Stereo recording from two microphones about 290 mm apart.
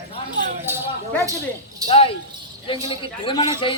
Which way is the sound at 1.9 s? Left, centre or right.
Centre.